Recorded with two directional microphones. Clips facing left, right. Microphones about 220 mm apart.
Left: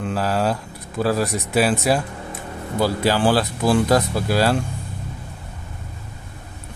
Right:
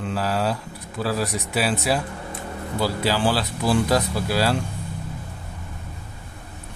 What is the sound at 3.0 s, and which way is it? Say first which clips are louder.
Speech: left 4 dB; 50° left (ahead or behind).